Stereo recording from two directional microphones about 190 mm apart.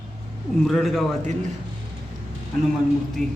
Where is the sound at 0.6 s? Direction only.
Centre (ahead or behind).